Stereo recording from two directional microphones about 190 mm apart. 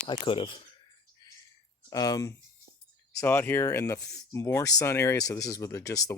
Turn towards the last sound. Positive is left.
turn(degrees=15)  # may be behind; listen again after turning